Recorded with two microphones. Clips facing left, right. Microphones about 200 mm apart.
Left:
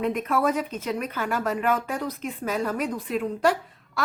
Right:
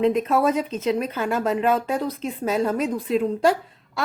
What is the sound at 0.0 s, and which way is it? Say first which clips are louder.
Speech: right 5 dB; 25° right (ahead or behind).